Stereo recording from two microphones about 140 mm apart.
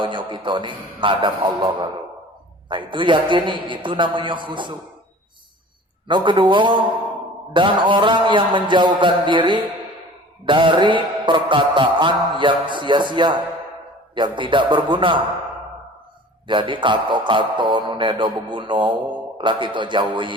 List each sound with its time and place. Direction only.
0.0 s music: 35° right (ahead or behind)
6.1 s music: 35° right (ahead or behind)
16.5 s music: 35° right (ahead or behind)